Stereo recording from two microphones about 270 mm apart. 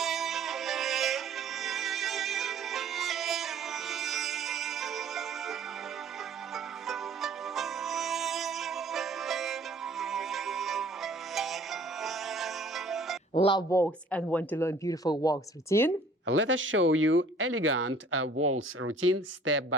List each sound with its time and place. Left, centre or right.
0.0 s music: centre
13.3 s speech: centre
16.2 s speech: right